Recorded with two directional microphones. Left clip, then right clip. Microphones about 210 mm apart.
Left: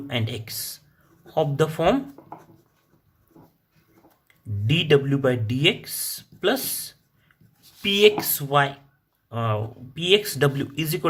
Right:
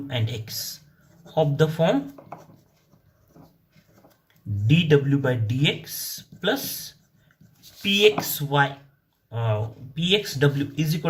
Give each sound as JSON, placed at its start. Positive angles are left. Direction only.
{"t": 0.1, "sound": "speech", "side_deg": 40}
{"t": 4.6, "sound": "speech", "side_deg": 40}